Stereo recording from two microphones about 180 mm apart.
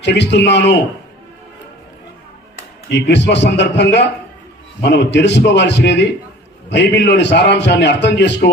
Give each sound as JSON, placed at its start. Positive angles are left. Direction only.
{"t": 0.0, "sound": "a man's voice", "side_deg": 75}
{"t": 2.9, "sound": "a man's voice", "side_deg": 75}